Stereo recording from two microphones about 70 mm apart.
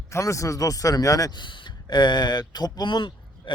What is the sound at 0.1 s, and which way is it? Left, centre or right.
A man's voice, left.